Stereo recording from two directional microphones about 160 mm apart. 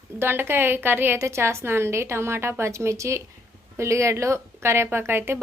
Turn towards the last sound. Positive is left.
turn(degrees=-15)  # may be behind; listen again after turning